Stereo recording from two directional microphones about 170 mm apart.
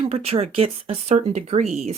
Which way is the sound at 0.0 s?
35° right (ahead or behind).